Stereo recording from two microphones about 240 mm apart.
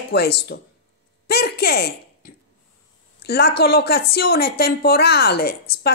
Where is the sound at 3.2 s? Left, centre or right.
Left.